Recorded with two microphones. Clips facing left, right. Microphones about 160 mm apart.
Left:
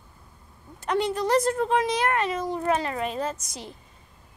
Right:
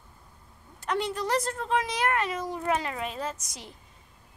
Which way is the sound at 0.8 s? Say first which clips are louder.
Left 4 dB; centre (ahead or behind).